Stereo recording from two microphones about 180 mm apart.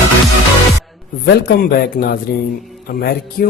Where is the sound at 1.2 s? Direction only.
60° left (ahead or behind).